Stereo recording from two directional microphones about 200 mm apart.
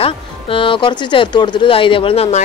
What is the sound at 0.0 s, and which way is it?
Speech, 25° left (ahead or behind).